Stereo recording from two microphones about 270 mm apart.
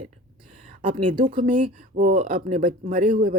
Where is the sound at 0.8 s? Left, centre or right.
Right.